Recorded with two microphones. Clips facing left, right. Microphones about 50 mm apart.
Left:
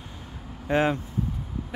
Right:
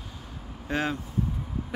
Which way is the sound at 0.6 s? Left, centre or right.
Left.